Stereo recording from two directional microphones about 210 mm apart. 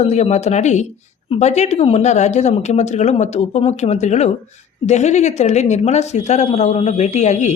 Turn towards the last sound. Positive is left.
turn(degrees=35)  # may be behind; listen again after turning